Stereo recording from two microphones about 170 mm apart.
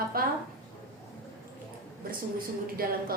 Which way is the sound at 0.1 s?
60° right (ahead or behind).